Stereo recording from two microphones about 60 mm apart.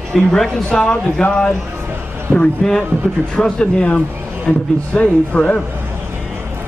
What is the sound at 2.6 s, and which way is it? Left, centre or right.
A man's voice, centre.